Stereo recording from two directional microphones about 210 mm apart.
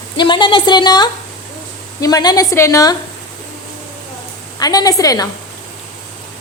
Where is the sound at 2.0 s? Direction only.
20° left (ahead or behind).